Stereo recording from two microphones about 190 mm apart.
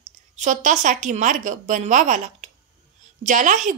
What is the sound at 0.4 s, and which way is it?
A woman's voice, 40° right (ahead or behind).